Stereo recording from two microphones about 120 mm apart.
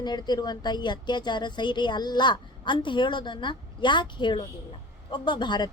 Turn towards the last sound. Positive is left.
turn(degrees=40)  # may be behind; listen again after turning